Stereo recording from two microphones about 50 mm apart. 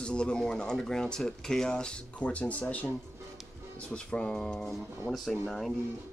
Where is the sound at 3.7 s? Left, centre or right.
Left.